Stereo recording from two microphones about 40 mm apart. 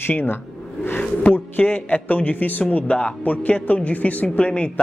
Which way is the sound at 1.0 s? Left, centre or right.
Left.